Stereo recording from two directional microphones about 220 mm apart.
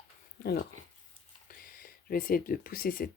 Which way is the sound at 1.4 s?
40° left (ahead or behind).